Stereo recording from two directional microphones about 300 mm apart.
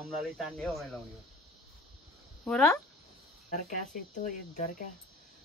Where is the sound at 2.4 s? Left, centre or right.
Centre.